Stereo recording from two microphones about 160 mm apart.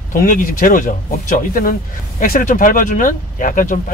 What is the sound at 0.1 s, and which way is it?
Speech, 60° left (ahead or behind).